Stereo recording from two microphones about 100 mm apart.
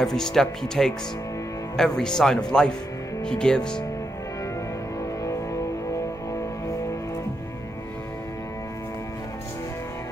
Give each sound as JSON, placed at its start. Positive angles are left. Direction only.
{"t": 0.0, "sound": "speech", "side_deg": 5}
{"t": 5.2, "sound": "music", "side_deg": 35}